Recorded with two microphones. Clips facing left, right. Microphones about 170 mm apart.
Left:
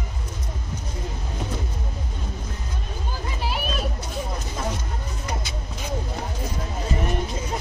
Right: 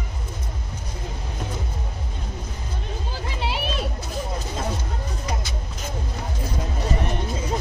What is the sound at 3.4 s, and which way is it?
Music, 25° right (ahead or behind).